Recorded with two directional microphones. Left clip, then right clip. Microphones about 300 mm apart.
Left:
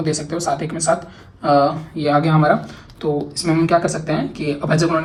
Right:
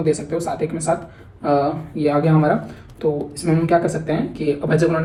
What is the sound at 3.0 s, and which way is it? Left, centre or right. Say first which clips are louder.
Speech: even; left.